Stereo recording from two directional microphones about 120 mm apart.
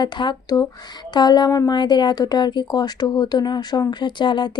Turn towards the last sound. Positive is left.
turn(degrees=40)  # may be behind; listen again after turning